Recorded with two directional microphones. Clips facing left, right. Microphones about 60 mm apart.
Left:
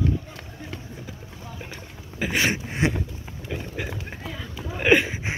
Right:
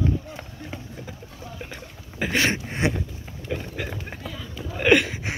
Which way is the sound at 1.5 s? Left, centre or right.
Centre.